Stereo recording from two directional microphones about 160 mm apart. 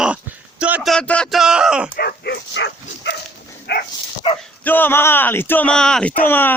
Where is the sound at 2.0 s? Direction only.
85° left.